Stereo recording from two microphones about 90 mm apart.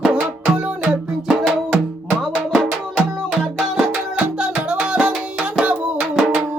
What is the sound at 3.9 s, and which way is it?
Music, 15° right (ahead or behind).